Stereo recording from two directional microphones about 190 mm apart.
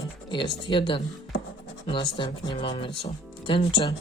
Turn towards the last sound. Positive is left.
turn(degrees=25)  # may be behind; listen again after turning